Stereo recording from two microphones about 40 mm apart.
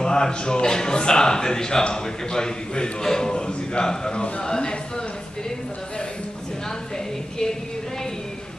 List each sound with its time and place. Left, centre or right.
0.0 s a man's voice: centre